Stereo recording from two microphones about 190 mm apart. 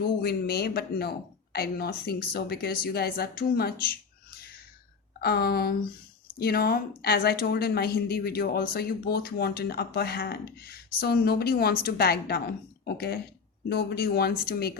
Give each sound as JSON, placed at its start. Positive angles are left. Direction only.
{"t": 0.0, "sound": "a woman's voice", "side_deg": 55}
{"t": 5.2, "sound": "a woman's voice", "side_deg": 55}